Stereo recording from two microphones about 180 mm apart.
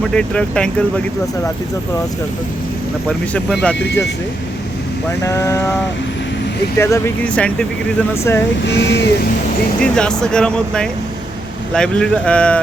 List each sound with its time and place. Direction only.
0.1 s speech: 5° left (ahead or behind)
3.1 s speech: 5° left (ahead or behind)
5.2 s speech: 15° left (ahead or behind)
6.7 s speech: 15° left (ahead or behind)
8.6 s speech: 70° left (ahead or behind)
9.8 s speech: 5° left (ahead or behind)